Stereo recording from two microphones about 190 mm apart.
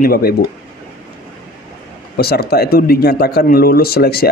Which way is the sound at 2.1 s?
55° left (ahead or behind).